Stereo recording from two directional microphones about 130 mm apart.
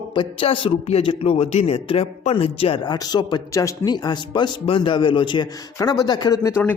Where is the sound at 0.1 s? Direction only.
40° left (ahead or behind).